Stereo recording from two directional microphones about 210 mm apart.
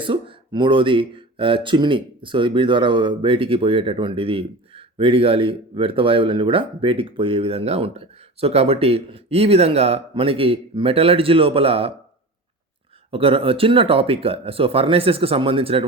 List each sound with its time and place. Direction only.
0.0 s speech: 25° right (ahead or behind)
13.1 s speech: 25° right (ahead or behind)